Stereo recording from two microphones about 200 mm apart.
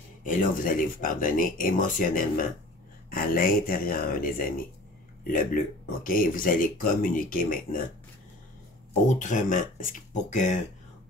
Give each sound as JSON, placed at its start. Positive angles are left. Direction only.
{"t": 0.2, "sound": "speech", "side_deg": 40}
{"t": 9.2, "sound": "speech", "side_deg": 40}